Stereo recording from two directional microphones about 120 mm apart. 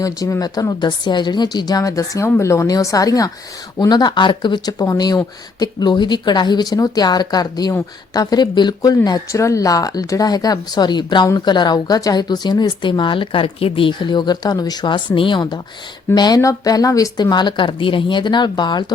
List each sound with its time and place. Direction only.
0.0 s speech: 30° left (ahead or behind)